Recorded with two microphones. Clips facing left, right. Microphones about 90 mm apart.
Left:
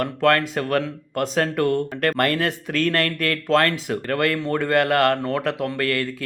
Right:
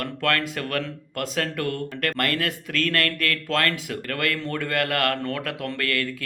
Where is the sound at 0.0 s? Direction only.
30° left (ahead or behind).